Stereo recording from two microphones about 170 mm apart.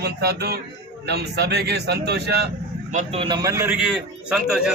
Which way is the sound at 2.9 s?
30° right (ahead or behind).